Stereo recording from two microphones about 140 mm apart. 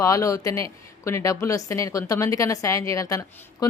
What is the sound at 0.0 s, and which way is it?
A woman's voice, 25° left (ahead or behind).